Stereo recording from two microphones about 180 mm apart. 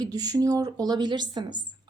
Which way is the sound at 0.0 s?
20° right (ahead or behind).